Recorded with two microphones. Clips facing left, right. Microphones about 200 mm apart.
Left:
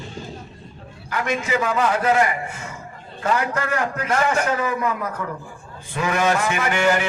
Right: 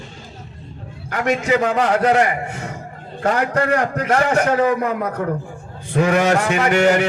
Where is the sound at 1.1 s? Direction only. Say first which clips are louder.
Right 5 dB; 60° right (ahead or behind).